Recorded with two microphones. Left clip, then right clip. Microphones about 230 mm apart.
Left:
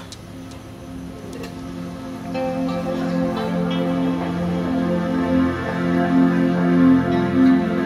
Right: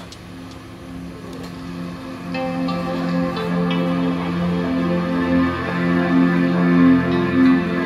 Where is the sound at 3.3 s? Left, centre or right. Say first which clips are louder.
Right 1 dB; right.